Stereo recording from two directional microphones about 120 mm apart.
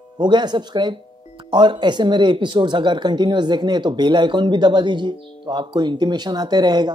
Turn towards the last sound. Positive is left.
turn(degrees=-35)  # may be behind; listen again after turning